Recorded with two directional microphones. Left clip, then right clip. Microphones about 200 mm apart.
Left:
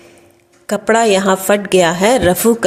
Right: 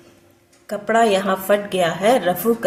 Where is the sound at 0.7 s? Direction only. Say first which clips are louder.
Left 4 dB; 40° left (ahead or behind).